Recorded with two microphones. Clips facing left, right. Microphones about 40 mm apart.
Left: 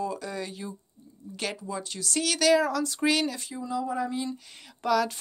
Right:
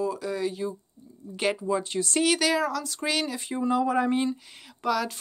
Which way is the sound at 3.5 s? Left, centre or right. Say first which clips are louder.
Right 7 dB; right.